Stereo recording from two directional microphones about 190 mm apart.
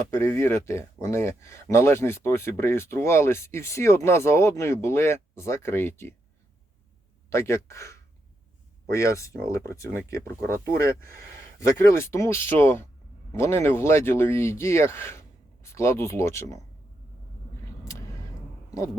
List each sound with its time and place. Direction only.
0.1 s speech: 15° left (ahead or behind)
7.3 s speech: 15° left (ahead or behind)